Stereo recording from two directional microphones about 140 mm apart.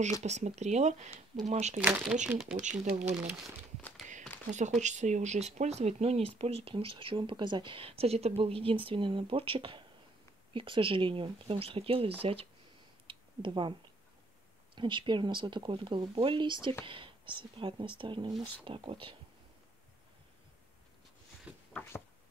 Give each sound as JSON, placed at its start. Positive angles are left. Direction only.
{"t": 0.2, "sound": "speech", "side_deg": -55}
{"t": 1.8, "sound": "speech", "side_deg": -10}
{"t": 2.8, "sound": "speech", "side_deg": -50}
{"t": 4.5, "sound": "speech", "side_deg": -60}
{"t": 13.0, "sound": "a sound", "side_deg": -35}
{"t": 14.8, "sound": "speech", "side_deg": -35}
{"t": 21.5, "sound": "a sound", "side_deg": -10}